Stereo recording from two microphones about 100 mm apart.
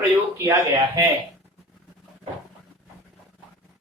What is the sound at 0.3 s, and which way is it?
Speech, 30° right (ahead or behind).